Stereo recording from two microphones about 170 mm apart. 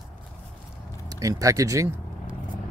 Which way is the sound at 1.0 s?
20° right (ahead or behind).